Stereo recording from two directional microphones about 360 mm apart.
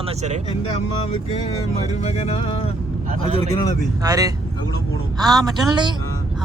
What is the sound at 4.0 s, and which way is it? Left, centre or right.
Speech, centre.